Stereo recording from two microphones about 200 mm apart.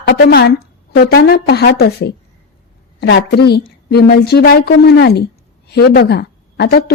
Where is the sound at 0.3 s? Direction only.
50° left (ahead or behind).